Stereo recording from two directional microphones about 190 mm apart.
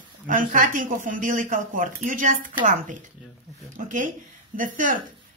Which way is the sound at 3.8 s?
45° right (ahead or behind).